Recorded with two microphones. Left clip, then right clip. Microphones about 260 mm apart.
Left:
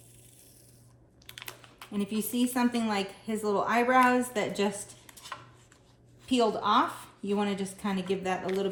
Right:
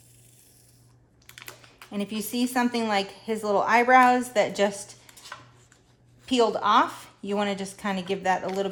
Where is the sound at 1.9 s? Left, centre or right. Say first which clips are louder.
Right 2 dB; right.